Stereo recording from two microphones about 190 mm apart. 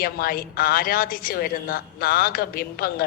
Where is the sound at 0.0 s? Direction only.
50° left (ahead or behind).